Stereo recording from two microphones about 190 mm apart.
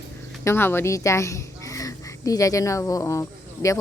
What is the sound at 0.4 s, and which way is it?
A woman's voice, 10° left (ahead or behind).